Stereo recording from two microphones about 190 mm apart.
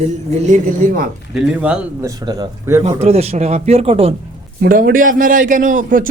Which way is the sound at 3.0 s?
30° right (ahead or behind).